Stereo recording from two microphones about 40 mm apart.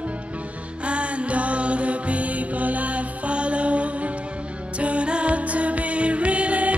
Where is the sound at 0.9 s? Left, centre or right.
Right.